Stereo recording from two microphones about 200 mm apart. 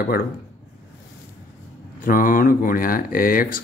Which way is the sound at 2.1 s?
45° left (ahead or behind).